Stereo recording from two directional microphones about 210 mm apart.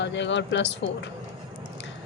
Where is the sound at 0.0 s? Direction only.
60° left (ahead or behind).